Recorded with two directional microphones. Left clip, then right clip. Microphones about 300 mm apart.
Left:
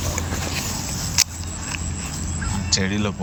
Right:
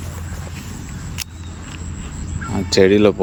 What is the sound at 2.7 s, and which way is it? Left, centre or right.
Speech, right.